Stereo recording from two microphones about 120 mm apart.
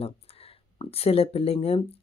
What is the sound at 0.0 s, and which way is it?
Speech, 55° left (ahead or behind).